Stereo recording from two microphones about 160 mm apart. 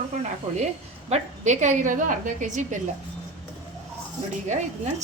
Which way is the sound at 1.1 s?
50° right (ahead or behind).